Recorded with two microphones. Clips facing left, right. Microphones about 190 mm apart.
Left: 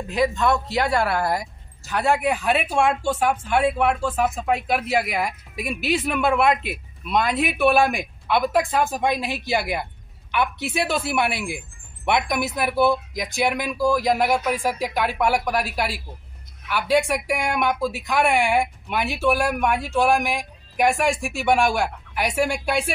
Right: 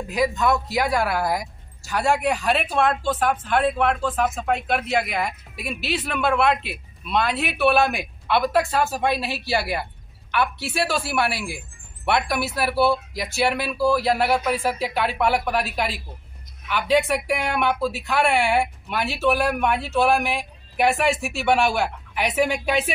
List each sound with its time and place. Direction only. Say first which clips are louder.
0.1 s speech: left 1 dB; centre (ahead or behind)
2.4 s speech: left 1 dB; 10° left (ahead or behind)